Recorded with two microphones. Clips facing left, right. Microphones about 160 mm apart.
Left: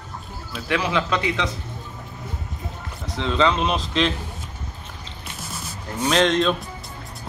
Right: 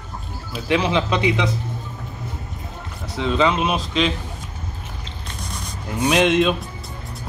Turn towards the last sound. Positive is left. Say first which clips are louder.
# right 2 dB
turn(degrees=-10)  # may be behind; listen again after turning